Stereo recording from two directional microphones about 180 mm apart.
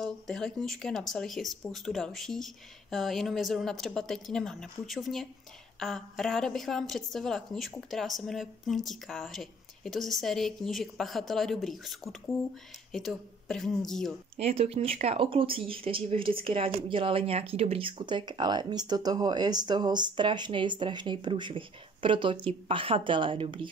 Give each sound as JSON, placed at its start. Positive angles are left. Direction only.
{"t": 0.0, "sound": "a woman's voice", "side_deg": 5}
{"t": 14.4, "sound": "speech", "side_deg": -35}